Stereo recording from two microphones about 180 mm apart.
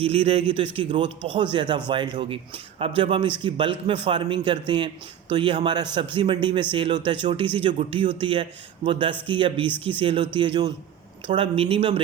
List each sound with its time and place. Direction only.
0.0 s a man's voice: 35° right (ahead or behind)